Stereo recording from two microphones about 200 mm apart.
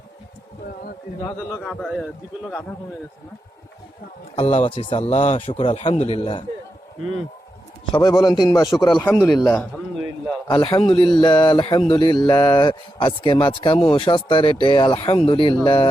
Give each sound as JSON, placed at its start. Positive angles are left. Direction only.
{"t": 1.6, "sound": "a man's voice", "side_deg": 0}
{"t": 4.4, "sound": "a man's voice", "side_deg": 30}
{"t": 7.9, "sound": "a man's voice", "side_deg": 20}
{"t": 9.6, "sound": "a sound", "side_deg": 0}
{"t": 10.5, "sound": "speech", "side_deg": 25}